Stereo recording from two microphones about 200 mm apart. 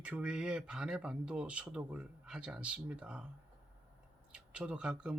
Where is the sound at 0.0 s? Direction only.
5° right (ahead or behind).